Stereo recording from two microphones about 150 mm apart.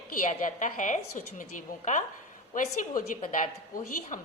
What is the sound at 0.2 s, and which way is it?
A woman's voice, 60° left (ahead or behind).